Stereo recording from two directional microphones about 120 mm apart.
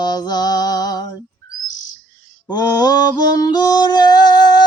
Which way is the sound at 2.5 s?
35° left (ahead or behind).